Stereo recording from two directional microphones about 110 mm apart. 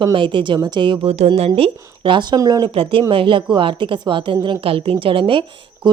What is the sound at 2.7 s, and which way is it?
Speech, 55° right (ahead or behind).